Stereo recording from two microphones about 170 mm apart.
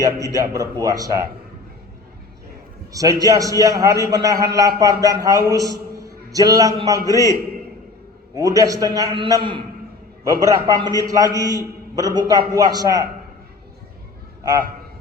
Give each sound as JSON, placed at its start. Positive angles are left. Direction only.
{"t": 0.0, "sound": "a man's voice", "side_deg": -20}
{"t": 2.9, "sound": "a man's voice", "side_deg": -20}
{"t": 7.1, "sound": "a man's voice", "side_deg": 20}
{"t": 8.4, "sound": "a man's voice", "side_deg": -20}